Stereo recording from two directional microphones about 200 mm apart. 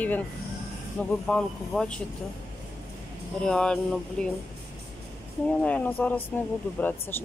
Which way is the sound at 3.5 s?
5° left (ahead or behind).